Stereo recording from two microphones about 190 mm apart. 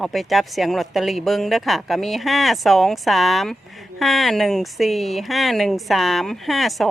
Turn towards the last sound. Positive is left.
turn(degrees=0)  # may be behind; listen again after turning